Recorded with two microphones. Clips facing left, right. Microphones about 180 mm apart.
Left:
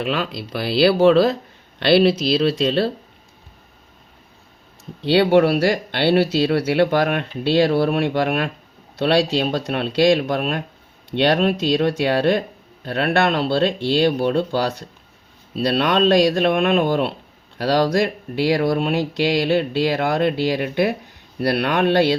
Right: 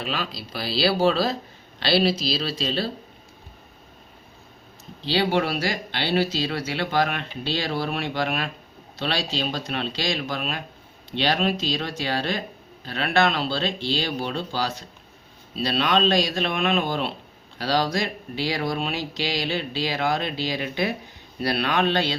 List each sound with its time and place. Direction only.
0.0 s speech: 55° left (ahead or behind)
5.0 s speech: 60° left (ahead or behind)